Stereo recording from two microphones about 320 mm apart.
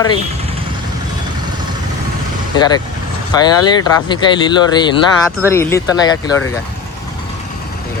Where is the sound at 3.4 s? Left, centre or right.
Centre.